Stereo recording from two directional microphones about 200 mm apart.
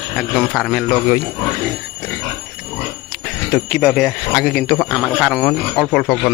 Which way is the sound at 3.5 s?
Centre (ahead or behind).